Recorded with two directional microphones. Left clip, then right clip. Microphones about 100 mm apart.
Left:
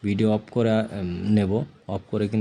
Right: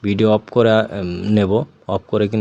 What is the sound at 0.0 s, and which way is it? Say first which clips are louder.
Speech: right 9 dB; 35° right (ahead or behind).